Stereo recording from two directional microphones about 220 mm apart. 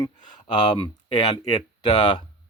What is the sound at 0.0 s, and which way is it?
Speech, 20° left (ahead or behind).